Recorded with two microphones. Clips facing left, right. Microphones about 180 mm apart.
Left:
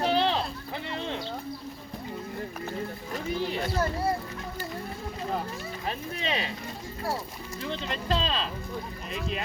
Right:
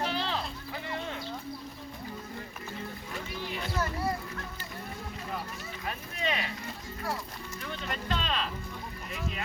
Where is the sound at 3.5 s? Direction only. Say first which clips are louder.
Left 1 dB; 30° left (ahead or behind).